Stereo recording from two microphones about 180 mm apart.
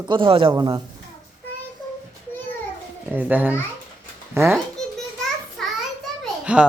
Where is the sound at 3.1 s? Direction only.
10° right (ahead or behind).